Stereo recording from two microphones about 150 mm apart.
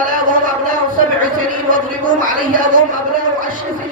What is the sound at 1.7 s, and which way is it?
Speech, 65° right (ahead or behind).